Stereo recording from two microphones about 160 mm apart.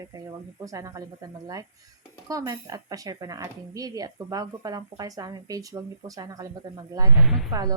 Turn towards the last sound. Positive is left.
turn(degrees=-25)  # may be behind; listen again after turning